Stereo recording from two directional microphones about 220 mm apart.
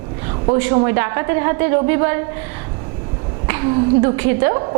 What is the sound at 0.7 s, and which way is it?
A woman's voice, 20° right (ahead or behind).